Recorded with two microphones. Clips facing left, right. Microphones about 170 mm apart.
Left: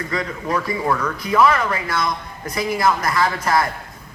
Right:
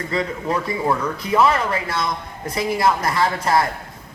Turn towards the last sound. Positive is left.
turn(degrees=-25)  # may be behind; listen again after turning